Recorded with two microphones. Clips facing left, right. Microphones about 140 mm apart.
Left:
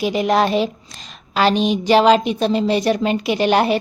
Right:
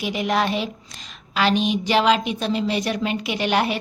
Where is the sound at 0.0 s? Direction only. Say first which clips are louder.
Left 5 dB; 35° left (ahead or behind).